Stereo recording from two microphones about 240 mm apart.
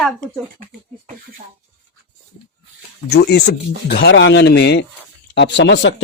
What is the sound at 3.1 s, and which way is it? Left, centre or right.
Speech, left.